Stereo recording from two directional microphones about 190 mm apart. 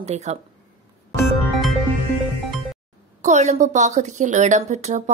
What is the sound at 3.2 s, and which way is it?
A woman's voice, 35° right (ahead or behind).